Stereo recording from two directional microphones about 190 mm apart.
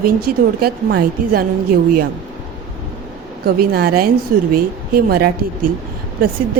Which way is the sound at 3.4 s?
55° right (ahead or behind).